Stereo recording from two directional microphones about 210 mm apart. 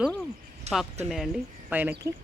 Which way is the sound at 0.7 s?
30° right (ahead or behind).